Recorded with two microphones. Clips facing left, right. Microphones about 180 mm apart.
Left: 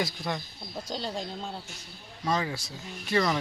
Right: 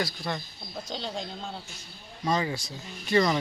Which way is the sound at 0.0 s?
20° left (ahead or behind).